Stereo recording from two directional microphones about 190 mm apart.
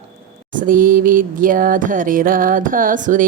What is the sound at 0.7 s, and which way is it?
Music, 45° right (ahead or behind).